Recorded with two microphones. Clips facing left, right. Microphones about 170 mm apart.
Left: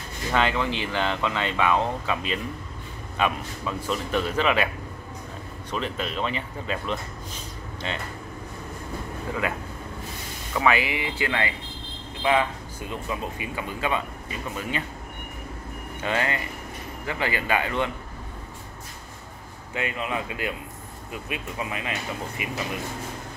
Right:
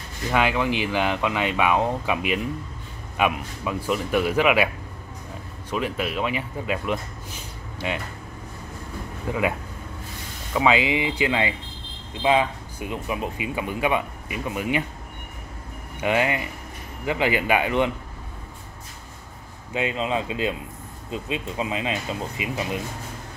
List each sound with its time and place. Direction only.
0.3 s speech: 10° right (ahead or behind)
5.7 s speech: 10° right (ahead or behind)
9.3 s speech: 15° right (ahead or behind)
10.5 s speech: 20° right (ahead or behind)
16.0 s speech: 15° right (ahead or behind)
19.7 s speech: 20° right (ahead or behind)